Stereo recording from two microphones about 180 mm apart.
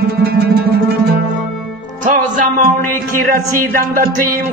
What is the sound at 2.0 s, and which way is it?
Music, 45° right (ahead or behind).